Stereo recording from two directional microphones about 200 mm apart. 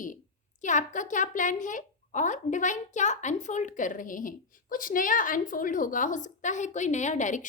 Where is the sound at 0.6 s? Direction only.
40° left (ahead or behind).